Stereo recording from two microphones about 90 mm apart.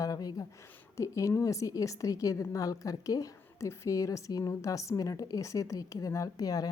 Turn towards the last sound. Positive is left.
turn(degrees=45)  # may be behind; listen again after turning